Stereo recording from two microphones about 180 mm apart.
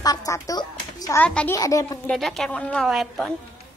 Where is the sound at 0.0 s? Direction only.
20° left (ahead or behind).